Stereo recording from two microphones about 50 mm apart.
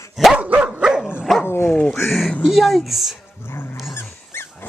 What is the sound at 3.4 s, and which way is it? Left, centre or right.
Dog, left.